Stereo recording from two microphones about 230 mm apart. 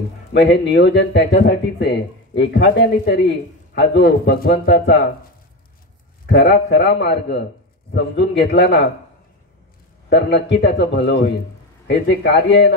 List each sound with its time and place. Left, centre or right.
0.3 s speech: left
6.2 s speech: left
10.0 s speech: left